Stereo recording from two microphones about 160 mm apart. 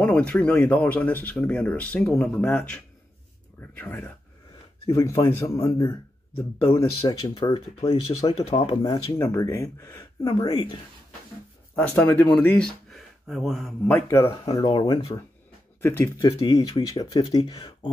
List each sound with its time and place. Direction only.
0.0 s speech: 10° left (ahead or behind)
8.4 s speech: 40° left (ahead or behind); by 10.0 s 20° left (ahead or behind)
10.2 s speech: 35° left (ahead or behind)
11.7 s speech: 15° left (ahead or behind)
13.9 s speech: 15° left (ahead or behind)
14.4 s speech: 30° left (ahead or behind)
16.2 s speech: 25° left (ahead or behind)